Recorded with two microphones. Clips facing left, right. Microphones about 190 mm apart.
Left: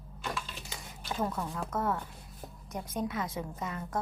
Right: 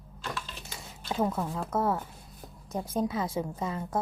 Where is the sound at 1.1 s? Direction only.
20° right (ahead or behind).